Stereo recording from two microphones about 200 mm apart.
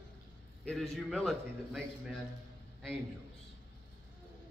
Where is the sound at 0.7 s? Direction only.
Centre (ahead or behind).